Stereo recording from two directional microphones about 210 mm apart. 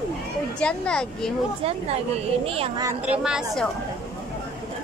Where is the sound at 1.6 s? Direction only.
25° right (ahead or behind).